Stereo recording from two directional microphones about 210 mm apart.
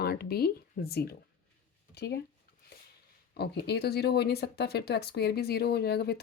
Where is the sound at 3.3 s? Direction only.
50° left (ahead or behind).